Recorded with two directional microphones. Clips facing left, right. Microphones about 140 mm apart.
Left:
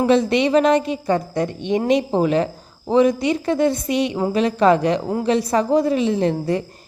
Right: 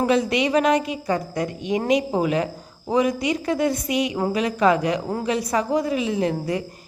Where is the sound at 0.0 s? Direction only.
25° left (ahead or behind).